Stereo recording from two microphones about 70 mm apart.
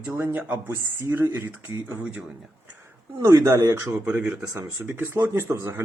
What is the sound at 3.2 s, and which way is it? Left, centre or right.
Speech, right.